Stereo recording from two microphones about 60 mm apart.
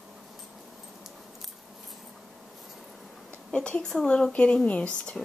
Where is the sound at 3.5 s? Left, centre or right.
Centre.